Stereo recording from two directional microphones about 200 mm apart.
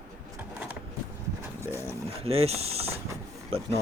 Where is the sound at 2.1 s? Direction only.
30° right (ahead or behind).